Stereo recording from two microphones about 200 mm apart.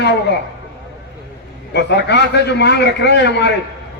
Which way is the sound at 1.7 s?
60° left (ahead or behind).